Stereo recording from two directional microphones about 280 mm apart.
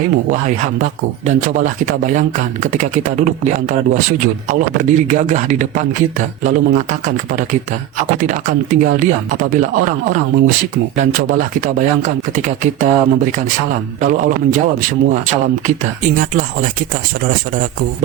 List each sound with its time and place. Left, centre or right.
0.3 s speech: right